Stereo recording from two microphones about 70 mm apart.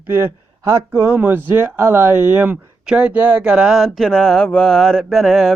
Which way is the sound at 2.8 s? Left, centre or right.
Centre.